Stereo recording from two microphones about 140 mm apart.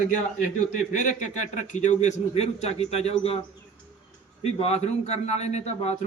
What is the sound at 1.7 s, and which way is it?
A man's voice, 55° left (ahead or behind).